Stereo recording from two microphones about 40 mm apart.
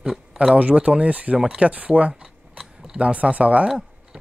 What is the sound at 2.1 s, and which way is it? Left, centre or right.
Typing, centre.